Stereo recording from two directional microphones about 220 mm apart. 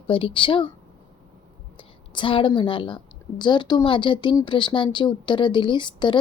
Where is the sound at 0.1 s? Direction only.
25° left (ahead or behind).